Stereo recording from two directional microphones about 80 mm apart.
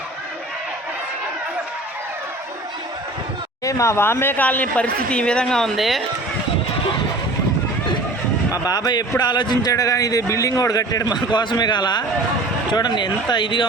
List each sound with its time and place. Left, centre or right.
3.6 s speech: left; by 6.0 s centre
8.5 s speech: left
9.7 s a man's voice: left
13.3 s speech: left